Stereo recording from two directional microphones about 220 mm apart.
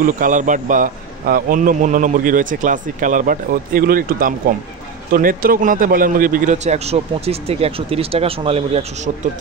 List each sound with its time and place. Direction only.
0.0 s a man's voice: 35° right (ahead or behind)